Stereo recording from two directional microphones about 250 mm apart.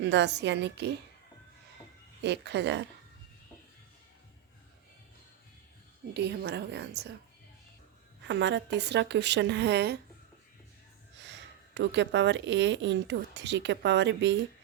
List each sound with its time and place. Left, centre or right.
0.0 s speech: right
2.2 s speech: right
6.1 s speech: right
8.2 s speech: right
11.2 s speech: right